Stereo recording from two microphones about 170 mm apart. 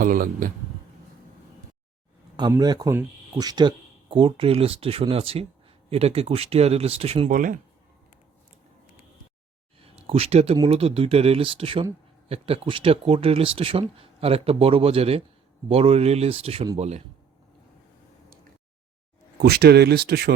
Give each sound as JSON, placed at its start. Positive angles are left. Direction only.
{"t": 0.0, "sound": "a man's voice", "side_deg": -55}
{"t": 2.3, "sound": "speech", "side_deg": -25}
{"t": 7.3, "sound": "speech", "side_deg": -50}
{"t": 9.8, "sound": "a sound", "side_deg": -35}
{"t": 10.7, "sound": "speech", "side_deg": -35}
{"t": 19.4, "sound": "speech", "side_deg": -70}